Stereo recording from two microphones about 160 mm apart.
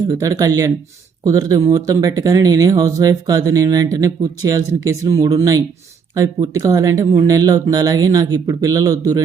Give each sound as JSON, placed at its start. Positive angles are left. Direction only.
{"t": 0.0, "sound": "speech", "side_deg": -20}